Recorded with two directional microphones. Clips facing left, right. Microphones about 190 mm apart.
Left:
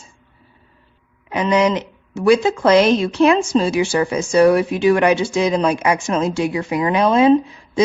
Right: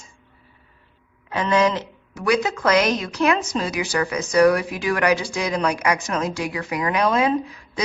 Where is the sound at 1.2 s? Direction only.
20° left (ahead or behind).